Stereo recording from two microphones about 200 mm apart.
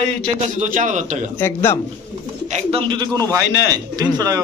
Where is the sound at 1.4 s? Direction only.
10° left (ahead or behind).